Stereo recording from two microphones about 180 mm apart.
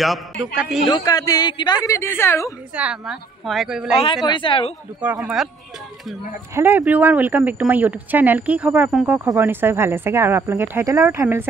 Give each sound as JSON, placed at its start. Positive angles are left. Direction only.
{"t": 0.0, "sound": "speech", "side_deg": 0}
{"t": 0.8, "sound": "a man's voice", "side_deg": 20}
{"t": 2.7, "sound": "speech", "side_deg": -5}
{"t": 4.3, "sound": "a man's voice", "side_deg": 30}
{"t": 5.0, "sound": "speech", "side_deg": -5}
{"t": 6.5, "sound": "speech", "side_deg": -10}